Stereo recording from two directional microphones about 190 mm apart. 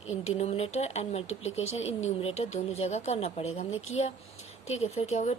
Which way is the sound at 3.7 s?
90° left.